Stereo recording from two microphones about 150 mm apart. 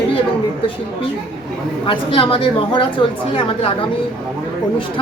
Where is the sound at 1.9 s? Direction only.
35° left (ahead or behind).